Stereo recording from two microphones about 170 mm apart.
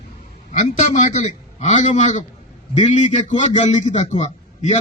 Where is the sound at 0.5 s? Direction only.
45° left (ahead or behind).